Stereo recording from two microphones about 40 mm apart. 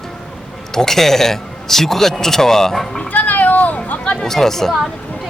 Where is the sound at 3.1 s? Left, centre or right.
Left.